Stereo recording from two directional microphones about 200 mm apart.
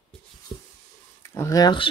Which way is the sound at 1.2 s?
15° left (ahead or behind).